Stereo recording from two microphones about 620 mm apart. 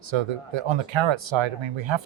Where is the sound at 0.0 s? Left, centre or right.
Right.